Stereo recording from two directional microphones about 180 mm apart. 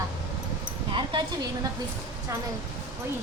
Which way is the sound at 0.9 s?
25° right (ahead or behind).